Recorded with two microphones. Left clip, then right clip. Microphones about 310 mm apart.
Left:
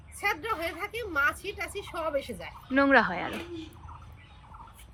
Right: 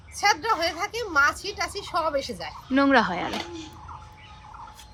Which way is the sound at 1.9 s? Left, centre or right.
Centre.